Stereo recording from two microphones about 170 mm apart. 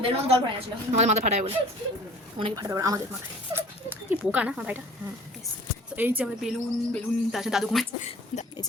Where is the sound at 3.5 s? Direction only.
10° right (ahead or behind).